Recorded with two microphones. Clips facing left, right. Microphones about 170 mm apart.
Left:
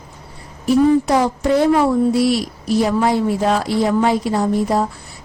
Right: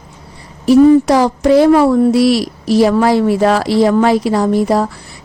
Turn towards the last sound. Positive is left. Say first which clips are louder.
# right 4 dB
turn(degrees=-85)